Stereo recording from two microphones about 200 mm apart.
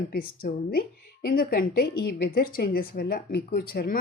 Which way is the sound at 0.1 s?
50° left (ahead or behind).